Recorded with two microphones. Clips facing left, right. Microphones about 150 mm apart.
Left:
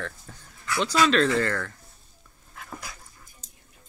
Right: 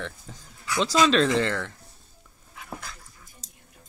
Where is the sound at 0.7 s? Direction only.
20° right (ahead or behind).